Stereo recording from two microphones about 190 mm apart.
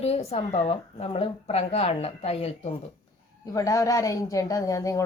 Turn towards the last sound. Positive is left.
turn(degrees=15)  # may be behind; listen again after turning